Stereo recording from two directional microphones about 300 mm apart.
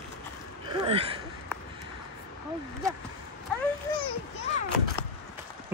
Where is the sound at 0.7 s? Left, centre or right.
Centre.